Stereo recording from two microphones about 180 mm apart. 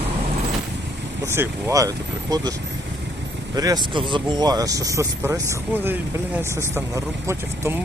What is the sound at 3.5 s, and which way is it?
Speech, 20° right (ahead or behind).